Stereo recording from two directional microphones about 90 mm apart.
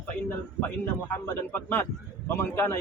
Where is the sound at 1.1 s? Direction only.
25° left (ahead or behind).